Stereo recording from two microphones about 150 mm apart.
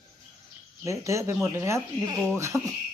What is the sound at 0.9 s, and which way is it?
Speech, 20° right (ahead or behind).